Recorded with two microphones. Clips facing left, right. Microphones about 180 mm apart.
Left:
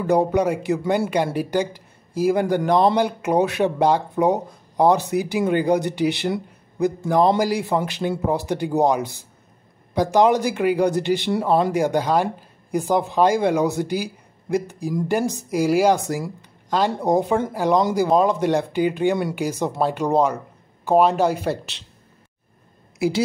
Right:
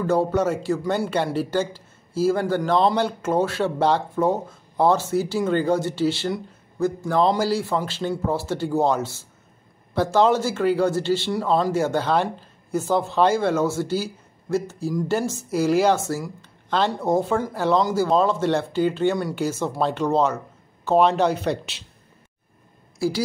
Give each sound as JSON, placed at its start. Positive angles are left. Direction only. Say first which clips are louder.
{"t": 0.0, "sound": "speech", "louder": "left 2 dB", "side_deg": 15}
{"t": 22.9, "sound": "a woman's voice", "louder": "left 3 dB", "side_deg": 20}